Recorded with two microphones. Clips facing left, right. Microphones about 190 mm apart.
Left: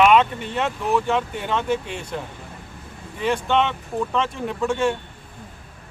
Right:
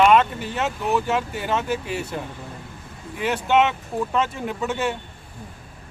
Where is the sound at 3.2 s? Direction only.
5° right (ahead or behind).